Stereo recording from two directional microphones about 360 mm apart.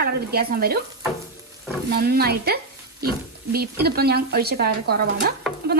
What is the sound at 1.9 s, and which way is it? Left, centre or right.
Speech, right.